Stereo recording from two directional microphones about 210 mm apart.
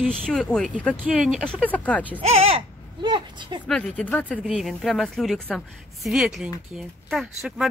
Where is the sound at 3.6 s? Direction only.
5° left (ahead or behind).